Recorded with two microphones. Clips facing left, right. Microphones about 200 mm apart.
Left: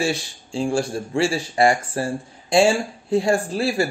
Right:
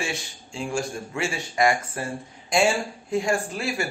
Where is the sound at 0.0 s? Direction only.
35° left (ahead or behind).